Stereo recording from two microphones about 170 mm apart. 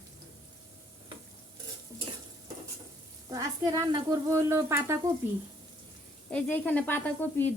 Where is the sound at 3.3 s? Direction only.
20° right (ahead or behind).